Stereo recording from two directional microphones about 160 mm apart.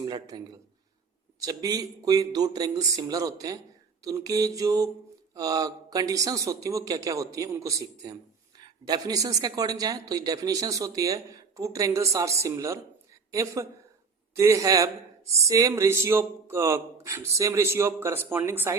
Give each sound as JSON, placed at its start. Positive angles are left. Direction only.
{"t": 0.0, "sound": "a man's voice", "side_deg": -25}